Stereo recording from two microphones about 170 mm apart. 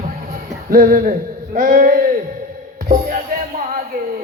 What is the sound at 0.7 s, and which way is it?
Speech, 55° right (ahead or behind).